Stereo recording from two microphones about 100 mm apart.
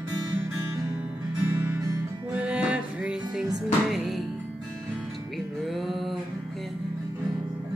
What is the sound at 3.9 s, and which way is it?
Music, centre (ahead or behind).